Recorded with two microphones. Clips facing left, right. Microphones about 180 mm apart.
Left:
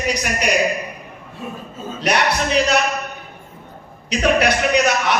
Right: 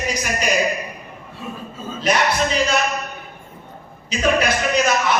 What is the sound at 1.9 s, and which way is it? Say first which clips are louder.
Speech: even; 65° left (ahead or behind).